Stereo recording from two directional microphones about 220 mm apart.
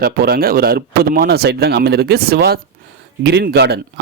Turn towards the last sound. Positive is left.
turn(degrees=-50)  # may be behind; listen again after turning